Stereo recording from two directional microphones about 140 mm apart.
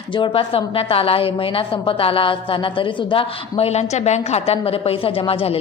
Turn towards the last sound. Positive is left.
turn(degrees=45)  # may be behind; listen again after turning